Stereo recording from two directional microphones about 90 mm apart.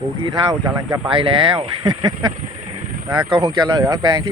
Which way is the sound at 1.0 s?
75° right (ahead or behind).